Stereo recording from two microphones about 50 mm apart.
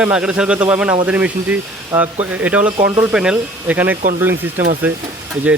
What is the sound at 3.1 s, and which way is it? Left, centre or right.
Speech, centre.